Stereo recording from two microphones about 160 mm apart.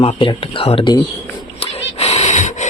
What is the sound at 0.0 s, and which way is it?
Speech, 35° left (ahead or behind).